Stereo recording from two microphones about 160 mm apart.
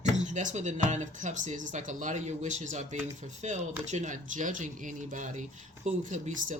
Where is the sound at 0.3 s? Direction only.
50° right (ahead or behind).